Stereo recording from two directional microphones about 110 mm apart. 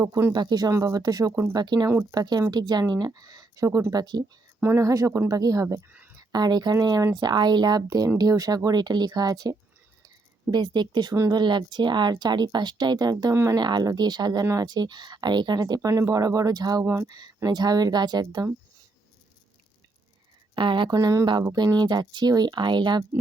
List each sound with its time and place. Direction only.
0.0 s speech: 25° right (ahead or behind)
0.3 s speech: 35° right (ahead or behind)
1.9 s speech: 25° right (ahead or behind)
2.5 s speech: 40° right (ahead or behind); by 6.1 s 15° right (ahead or behind)
6.1 s speech: 40° right (ahead or behind)
13.6 s speech: 40° right (ahead or behind)
16.8 s speech: 25° right (ahead or behind)
17.1 s speech: 35° right (ahead or behind)
20.6 s speech: 45° right (ahead or behind)